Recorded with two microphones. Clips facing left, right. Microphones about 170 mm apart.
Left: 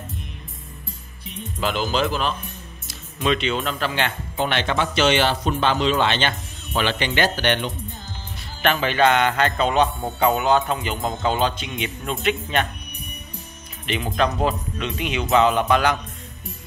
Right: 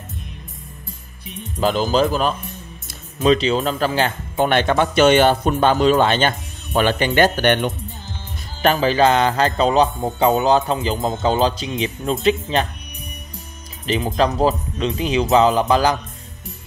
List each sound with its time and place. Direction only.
1.6 s music: 40° right (ahead or behind)
4.4 s a man's voice: 50° right (ahead or behind)
8.6 s music: 35° right (ahead or behind)
13.8 s music: 35° right (ahead or behind)